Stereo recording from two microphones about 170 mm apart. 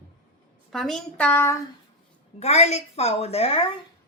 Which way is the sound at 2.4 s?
40° left (ahead or behind).